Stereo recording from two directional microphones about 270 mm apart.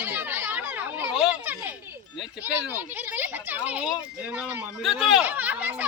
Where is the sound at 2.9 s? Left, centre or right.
Centre.